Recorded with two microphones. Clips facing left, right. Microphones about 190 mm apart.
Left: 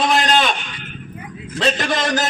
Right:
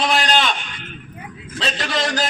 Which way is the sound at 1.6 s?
50° left (ahead or behind).